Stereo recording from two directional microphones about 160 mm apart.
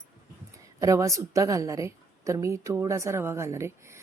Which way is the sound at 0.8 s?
20° right (ahead or behind).